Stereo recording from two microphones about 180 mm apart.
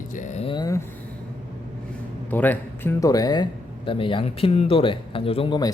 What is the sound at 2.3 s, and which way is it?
Speech, 10° left (ahead or behind).